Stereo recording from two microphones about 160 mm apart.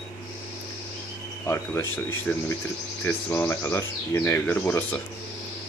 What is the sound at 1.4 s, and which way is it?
Speech, 10° left (ahead or behind).